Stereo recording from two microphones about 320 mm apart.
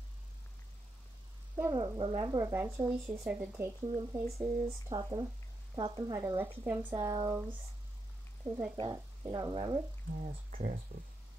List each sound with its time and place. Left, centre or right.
1.6 s speech: centre
8.7 s speech: centre
10.1 s speech: right